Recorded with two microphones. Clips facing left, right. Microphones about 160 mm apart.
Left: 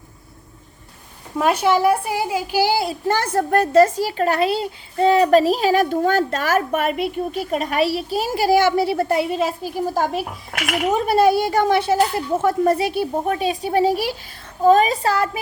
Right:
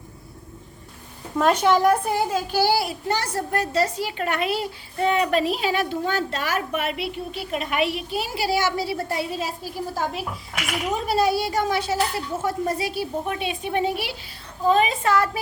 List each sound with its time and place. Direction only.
1.4 s a child's voice: 10° left (ahead or behind)
3.1 s a woman's voice: 55° left (ahead or behind)
10.5 s speech: 65° left (ahead or behind)
13.4 s a woman's voice: 35° left (ahead or behind)